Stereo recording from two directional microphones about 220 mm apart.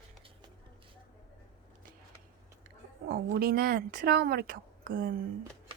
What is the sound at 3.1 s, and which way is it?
Speech, 45° right (ahead or behind).